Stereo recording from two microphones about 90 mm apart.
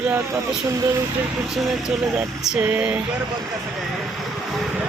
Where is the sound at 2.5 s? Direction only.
15° right (ahead or behind).